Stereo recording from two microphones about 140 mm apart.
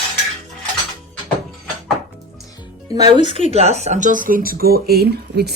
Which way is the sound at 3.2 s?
40° right (ahead or behind).